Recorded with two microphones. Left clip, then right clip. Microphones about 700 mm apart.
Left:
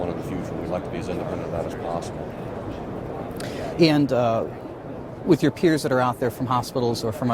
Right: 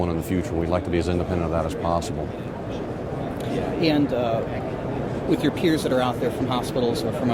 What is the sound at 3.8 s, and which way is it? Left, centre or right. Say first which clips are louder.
Speech: left 4 dB; left.